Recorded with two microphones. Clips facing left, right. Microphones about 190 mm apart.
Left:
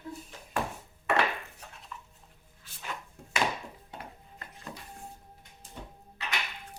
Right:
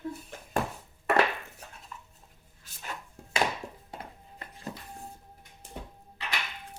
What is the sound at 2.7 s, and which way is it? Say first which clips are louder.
Chopping: even; 40° right (ahead or behind).